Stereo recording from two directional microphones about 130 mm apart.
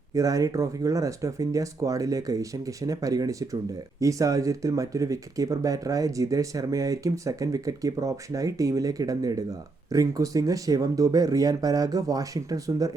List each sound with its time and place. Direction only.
0.1 s speech: 25° right (ahead or behind)